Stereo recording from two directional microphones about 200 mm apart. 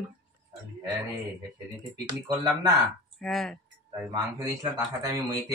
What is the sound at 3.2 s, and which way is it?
Speech, centre (ahead or behind).